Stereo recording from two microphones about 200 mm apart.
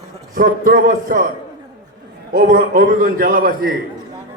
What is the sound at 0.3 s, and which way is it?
Speech, 45° right (ahead or behind).